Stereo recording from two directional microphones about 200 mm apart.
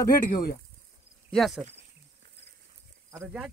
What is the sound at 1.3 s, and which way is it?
Speech, centre (ahead or behind).